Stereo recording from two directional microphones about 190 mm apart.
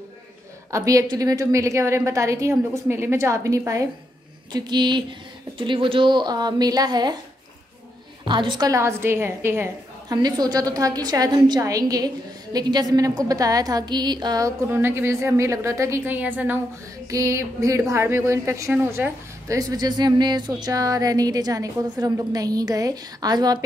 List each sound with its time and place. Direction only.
0.7 s a woman's voice: 15° right (ahead or behind)
8.3 s a woman's voice: 25° right (ahead or behind)